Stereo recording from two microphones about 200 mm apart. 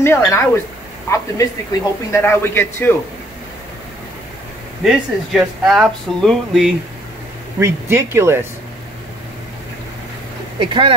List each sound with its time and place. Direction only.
0.0 s speech: 15° left (ahead or behind)
4.8 s speech: centre (ahead or behind)
7.5 s speech: 15° right (ahead or behind)
10.6 s speech: 25° right (ahead or behind)